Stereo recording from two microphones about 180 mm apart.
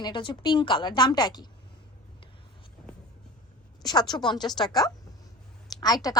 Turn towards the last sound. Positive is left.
turn(degrees=20)  # may be behind; listen again after turning